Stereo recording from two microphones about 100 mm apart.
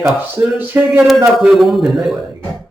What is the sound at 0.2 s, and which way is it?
Speech, 20° right (ahead or behind).